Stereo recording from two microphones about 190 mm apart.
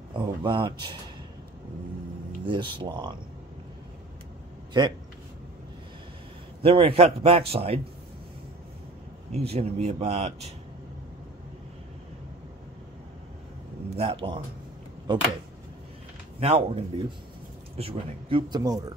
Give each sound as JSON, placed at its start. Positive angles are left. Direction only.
{"t": 0.1, "sound": "speech", "side_deg": -25}
{"t": 2.4, "sound": "speech", "side_deg": -25}
{"t": 4.7, "sound": "speech", "side_deg": -25}
{"t": 6.6, "sound": "a man's voice", "side_deg": -30}
{"t": 9.3, "sound": "a man's voice", "side_deg": -35}
{"t": 13.9, "sound": "speech", "side_deg": -30}
{"t": 16.3, "sound": "a man's voice", "side_deg": -30}